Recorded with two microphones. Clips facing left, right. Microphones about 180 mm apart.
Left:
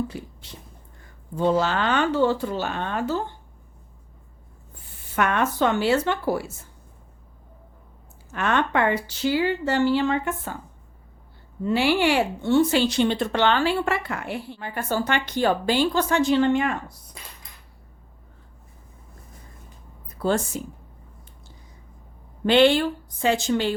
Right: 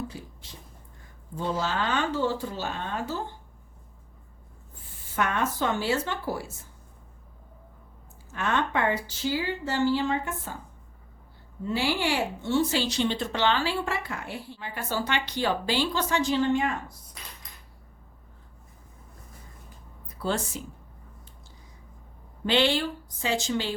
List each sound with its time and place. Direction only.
0.1 s a woman's voice: 60° left (ahead or behind)
1.4 s speech: 70° left (ahead or behind)
5.1 s speech: 70° left (ahead or behind)
8.3 s speech: 70° left (ahead or behind)
11.6 s a woman's voice: 70° left (ahead or behind)
20.1 s speech: 50° left (ahead or behind)
22.4 s a woman's voice: 55° left (ahead or behind)